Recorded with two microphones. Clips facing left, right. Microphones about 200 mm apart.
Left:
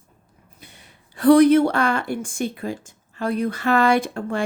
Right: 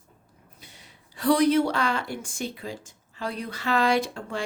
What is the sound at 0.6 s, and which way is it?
A woman's voice, 55° left (ahead or behind).